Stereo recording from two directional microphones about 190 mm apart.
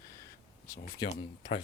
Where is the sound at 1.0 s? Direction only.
20° left (ahead or behind).